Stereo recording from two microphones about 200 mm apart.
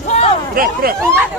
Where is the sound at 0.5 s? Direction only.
45° right (ahead or behind).